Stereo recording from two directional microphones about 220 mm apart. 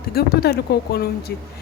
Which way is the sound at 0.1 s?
45° left (ahead or behind).